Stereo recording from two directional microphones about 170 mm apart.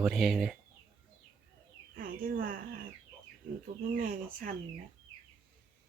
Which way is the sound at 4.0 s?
55° right (ahead or behind).